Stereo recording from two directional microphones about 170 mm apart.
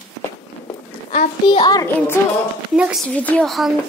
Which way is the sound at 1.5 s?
25° left (ahead or behind).